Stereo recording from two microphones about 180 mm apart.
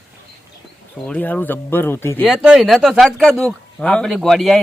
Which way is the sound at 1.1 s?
10° left (ahead or behind).